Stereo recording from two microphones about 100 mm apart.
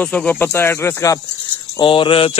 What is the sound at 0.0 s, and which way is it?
Speech, 15° left (ahead or behind).